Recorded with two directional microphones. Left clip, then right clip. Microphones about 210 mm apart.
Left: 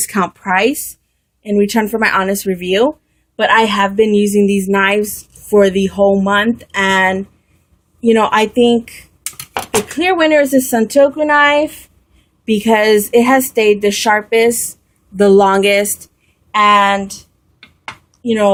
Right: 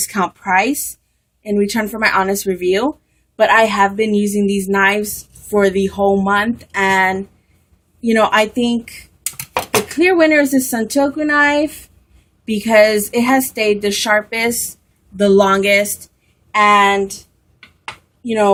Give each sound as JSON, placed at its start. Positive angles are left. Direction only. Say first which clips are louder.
{"t": 0.0, "sound": "a woman's voice", "louder": "left 1 dB", "side_deg": 45}
{"t": 18.3, "sound": "speech", "louder": "left 1 dB", "side_deg": 40}